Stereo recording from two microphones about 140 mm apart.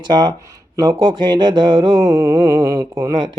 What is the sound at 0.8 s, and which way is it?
Mantra, 30° right (ahead or behind).